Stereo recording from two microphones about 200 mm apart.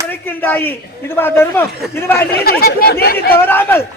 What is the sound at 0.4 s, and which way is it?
A man's voice, 10° left (ahead or behind).